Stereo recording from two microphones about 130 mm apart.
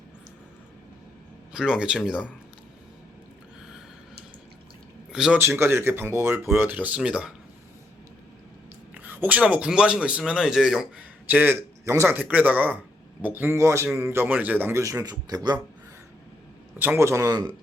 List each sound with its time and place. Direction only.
1.5 s speech: 5° right (ahead or behind)
5.1 s speech: 5° right (ahead or behind)
5.4 s speech: 20° right (ahead or behind)
9.0 s a man's voice: 15° right (ahead or behind); by 15.5 s 30° right (ahead or behind)
16.7 s a man's voice: 15° right (ahead or behind)